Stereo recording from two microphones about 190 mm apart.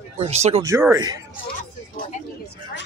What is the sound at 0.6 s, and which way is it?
Speech, 15° right (ahead or behind).